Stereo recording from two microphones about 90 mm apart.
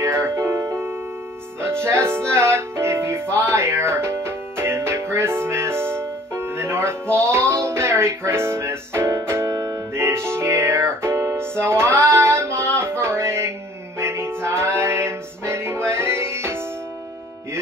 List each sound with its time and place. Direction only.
0.0 s music: 30° right (ahead or behind)